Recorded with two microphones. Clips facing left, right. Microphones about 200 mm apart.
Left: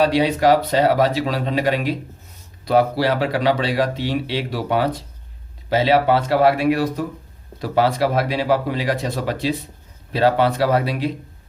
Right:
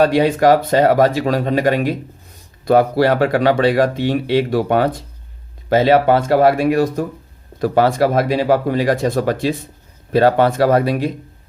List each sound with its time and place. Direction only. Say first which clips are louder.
0.0 s speech: right 3 dB; 50° right (ahead or behind)